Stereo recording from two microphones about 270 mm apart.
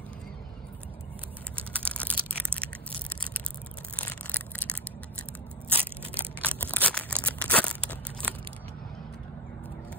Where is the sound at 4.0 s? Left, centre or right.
Centre.